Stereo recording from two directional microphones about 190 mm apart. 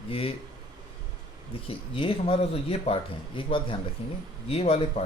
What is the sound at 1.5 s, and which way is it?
Speech, 30° left (ahead or behind).